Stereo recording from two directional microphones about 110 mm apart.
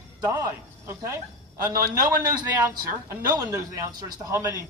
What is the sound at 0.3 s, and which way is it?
Speech, 25° right (ahead or behind).